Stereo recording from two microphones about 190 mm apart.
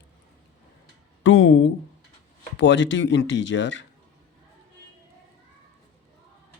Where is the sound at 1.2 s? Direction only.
80° left.